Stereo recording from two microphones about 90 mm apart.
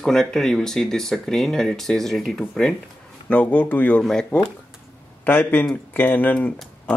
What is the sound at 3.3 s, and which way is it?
Speech, 15° left (ahead or behind).